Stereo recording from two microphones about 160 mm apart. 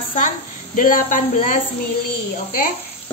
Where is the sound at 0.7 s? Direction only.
55° left (ahead or behind).